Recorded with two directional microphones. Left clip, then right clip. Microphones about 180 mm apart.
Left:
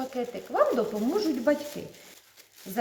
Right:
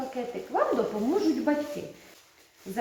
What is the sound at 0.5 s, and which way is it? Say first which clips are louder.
Speech: left 2 dB; 75° left (ahead or behind).